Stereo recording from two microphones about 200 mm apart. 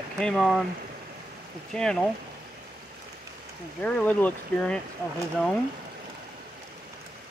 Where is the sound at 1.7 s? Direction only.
5° left (ahead or behind).